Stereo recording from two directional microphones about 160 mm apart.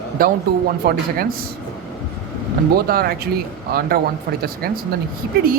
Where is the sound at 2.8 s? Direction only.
75° right (ahead or behind).